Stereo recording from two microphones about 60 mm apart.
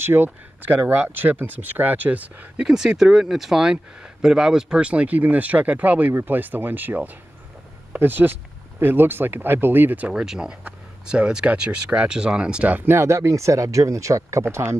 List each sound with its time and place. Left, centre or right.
0.0 s speech: right
2.6 s speech: centre; by 10.0 s right
10.0 s speech: centre
12.9 s speech: right
14.4 s speech: right